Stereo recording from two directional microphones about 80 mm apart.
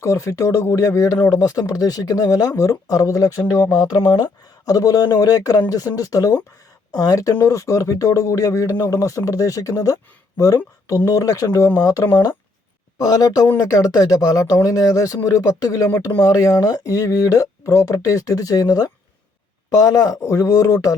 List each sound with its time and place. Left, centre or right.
0.0 s speech: left